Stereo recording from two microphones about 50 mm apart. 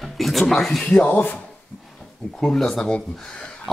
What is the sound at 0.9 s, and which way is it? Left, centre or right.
Speech, left.